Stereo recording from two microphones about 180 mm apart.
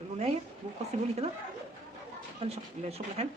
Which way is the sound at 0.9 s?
40° right (ahead or behind).